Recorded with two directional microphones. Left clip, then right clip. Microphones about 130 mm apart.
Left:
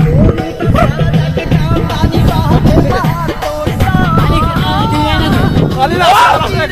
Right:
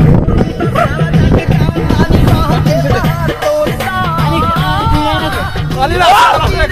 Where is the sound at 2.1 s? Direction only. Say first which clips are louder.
Even; 55° right (ahead or behind).